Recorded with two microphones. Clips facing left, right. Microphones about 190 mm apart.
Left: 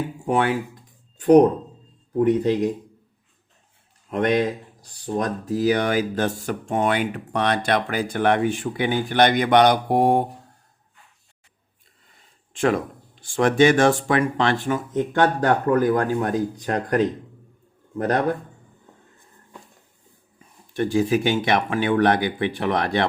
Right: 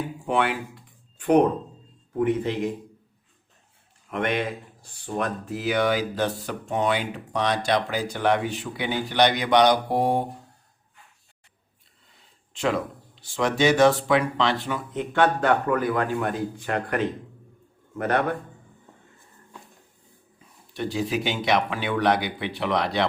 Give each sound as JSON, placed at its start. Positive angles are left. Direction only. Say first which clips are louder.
{"t": 0.3, "sound": "speech", "louder": "left 3 dB", "side_deg": 45}
{"t": 4.1, "sound": "speech", "louder": "left 5 dB", "side_deg": 40}
{"t": 12.5, "sound": "speech", "louder": "left 4 dB", "side_deg": 50}
{"t": 20.7, "sound": "speech", "louder": "left 6 dB", "side_deg": 50}